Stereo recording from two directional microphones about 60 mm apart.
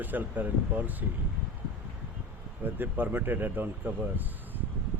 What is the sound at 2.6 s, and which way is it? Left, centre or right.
Speech, right.